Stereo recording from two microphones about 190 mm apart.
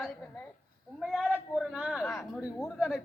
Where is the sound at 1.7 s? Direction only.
5° right (ahead or behind).